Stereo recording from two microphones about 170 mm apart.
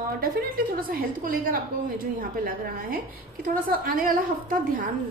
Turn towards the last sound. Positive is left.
turn(degrees=-55)  # may be behind; listen again after turning